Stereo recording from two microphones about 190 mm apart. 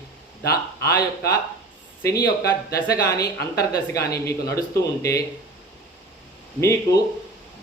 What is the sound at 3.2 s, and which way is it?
Speech, 55° left (ahead or behind).